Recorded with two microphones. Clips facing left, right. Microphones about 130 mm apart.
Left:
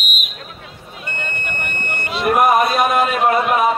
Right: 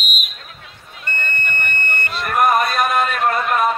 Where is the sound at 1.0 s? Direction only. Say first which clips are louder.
Right 2 dB; 5° left (ahead or behind).